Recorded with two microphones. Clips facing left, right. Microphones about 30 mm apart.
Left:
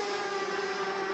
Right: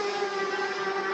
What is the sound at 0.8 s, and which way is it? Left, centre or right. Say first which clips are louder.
Vehicle: right 2 dB; centre.